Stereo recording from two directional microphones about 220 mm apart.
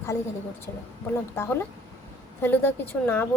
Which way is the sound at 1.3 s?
10° left (ahead or behind).